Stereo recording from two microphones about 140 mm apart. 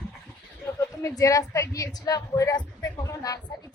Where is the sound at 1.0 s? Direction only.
20° left (ahead or behind).